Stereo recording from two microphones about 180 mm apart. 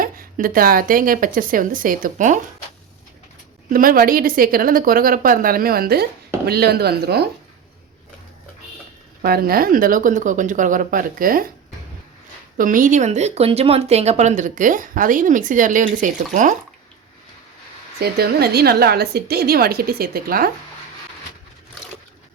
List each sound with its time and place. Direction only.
0.0 s speech: 50° right (ahead or behind)
3.7 s speech: 50° right (ahead or behind)
9.2 s speech: 55° right (ahead or behind)
12.5 s speech: 45° right (ahead or behind)
18.0 s a woman's voice: 60° right (ahead or behind)